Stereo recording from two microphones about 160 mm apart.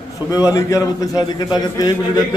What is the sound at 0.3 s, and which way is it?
A man's voice, 20° left (ahead or behind).